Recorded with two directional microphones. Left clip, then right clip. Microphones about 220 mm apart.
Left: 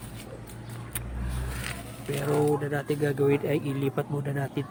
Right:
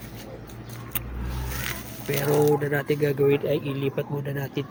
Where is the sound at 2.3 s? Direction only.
Centre (ahead or behind).